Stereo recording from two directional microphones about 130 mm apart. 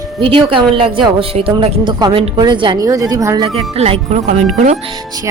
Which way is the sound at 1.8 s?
35° right (ahead or behind).